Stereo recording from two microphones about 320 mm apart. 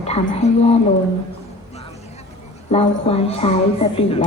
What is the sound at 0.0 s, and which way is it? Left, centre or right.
Speech, centre.